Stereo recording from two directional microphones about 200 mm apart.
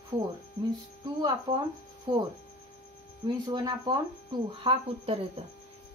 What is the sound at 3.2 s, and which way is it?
Speech, 20° right (ahead or behind).